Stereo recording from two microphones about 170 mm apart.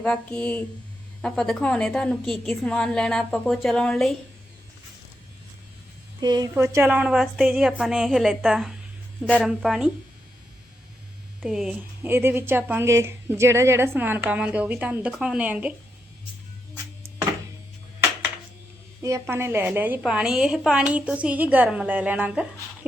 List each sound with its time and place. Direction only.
0.0 s a woman's voice: 5° left (ahead or behind)
6.1 s speech: 25° right (ahead or behind)
6.5 s a woman's voice: 10° right (ahead or behind)
11.4 s a woman's voice: 5° right (ahead or behind)
19.0 s a woman's voice: 15° right (ahead or behind)